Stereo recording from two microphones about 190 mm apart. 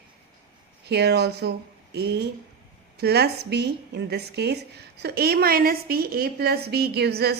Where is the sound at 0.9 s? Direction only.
60° right (ahead or behind).